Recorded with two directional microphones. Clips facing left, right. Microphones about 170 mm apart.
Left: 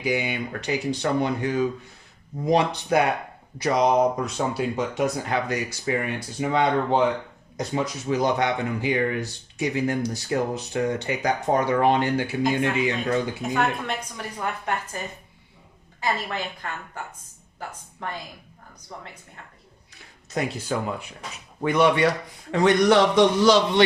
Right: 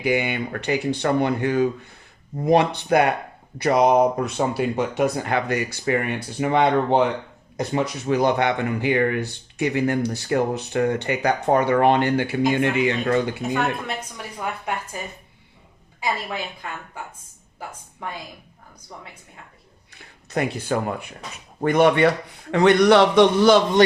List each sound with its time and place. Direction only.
0.0 s speech: 60° right (ahead or behind)
13.5 s a woman's voice: centre (ahead or behind)
16.0 s a woman's voice: 10° right (ahead or behind)
19.9 s speech: 60° right (ahead or behind)
22.5 s speech: 65° right (ahead or behind)